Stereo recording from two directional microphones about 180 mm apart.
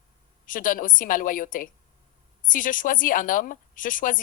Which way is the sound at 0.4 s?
50° left (ahead or behind).